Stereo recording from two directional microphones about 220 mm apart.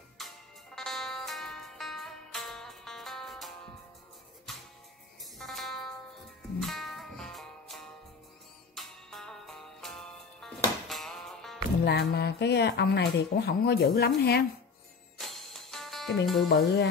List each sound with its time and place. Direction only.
0.2 s music: centre (ahead or behind)
5.4 s music: centre (ahead or behind)
11.8 s speech: 45° left (ahead or behind)
15.1 s music: centre (ahead or behind)
16.4 s speech: 45° left (ahead or behind)